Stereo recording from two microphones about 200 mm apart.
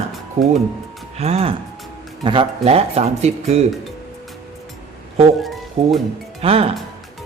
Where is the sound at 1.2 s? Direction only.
30° right (ahead or behind).